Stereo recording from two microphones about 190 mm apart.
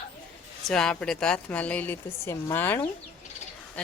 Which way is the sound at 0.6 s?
5° left (ahead or behind).